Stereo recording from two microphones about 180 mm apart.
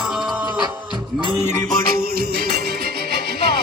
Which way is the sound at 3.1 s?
65° right (ahead or behind).